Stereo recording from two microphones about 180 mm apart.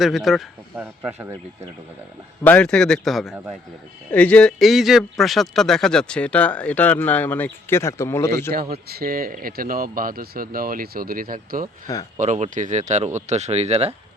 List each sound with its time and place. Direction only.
0.0 s a man's voice: centre (ahead or behind)
2.4 s a man's voice: 10° left (ahead or behind)
8.7 s speech: 60° right (ahead or behind); by 13.9 s 35° right (ahead or behind)